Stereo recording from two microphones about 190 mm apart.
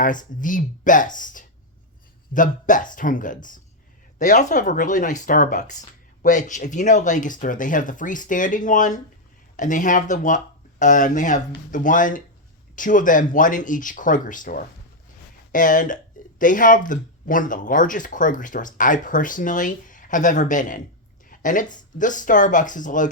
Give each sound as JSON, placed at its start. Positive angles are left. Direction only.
{"t": 0.0, "sound": "speech", "side_deg": 45}